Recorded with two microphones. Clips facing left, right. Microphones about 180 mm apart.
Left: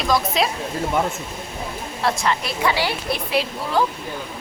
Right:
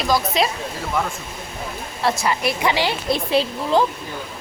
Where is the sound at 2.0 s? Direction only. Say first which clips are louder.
Right 2 dB; 5° right (ahead or behind).